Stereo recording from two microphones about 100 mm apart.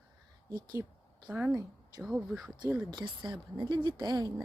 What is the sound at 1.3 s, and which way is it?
Speech, 15° right (ahead or behind).